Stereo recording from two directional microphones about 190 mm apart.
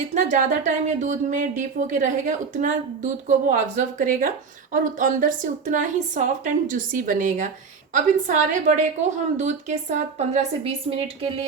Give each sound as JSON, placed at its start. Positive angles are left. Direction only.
{"t": 0.1, "sound": "a woman's voice", "side_deg": -40}